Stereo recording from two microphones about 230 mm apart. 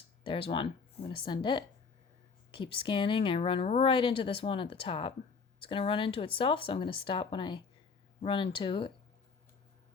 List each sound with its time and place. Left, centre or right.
0.3 s speech: left